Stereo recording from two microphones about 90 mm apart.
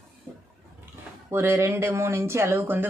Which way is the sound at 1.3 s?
25° right (ahead or behind).